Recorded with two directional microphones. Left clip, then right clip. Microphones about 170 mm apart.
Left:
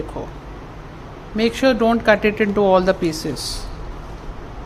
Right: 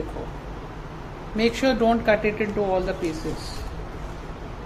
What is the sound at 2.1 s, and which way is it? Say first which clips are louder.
Speech: left 6 dB; 45° left (ahead or behind).